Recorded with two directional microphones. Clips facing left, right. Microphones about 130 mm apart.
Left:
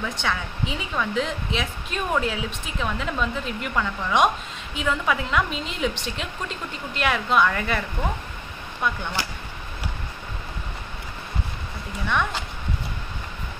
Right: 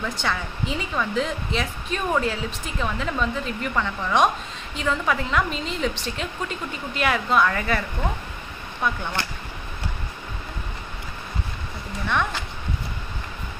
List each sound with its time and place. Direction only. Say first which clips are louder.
0.0 s speech: even; centre (ahead or behind)
8.8 s speech: right 1 dB; 5° left (ahead or behind)